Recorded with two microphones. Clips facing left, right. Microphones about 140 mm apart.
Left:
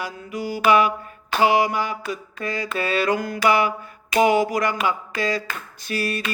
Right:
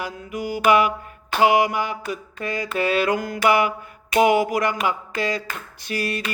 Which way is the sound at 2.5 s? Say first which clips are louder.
Right 2 dB; 15° right (ahead or behind).